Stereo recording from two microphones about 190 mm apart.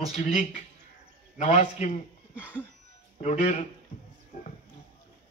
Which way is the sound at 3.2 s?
35° left (ahead or behind).